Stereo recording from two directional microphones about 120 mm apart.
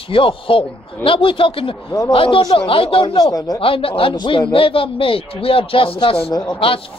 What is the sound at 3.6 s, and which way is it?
A man's voice, 50° left (ahead or behind).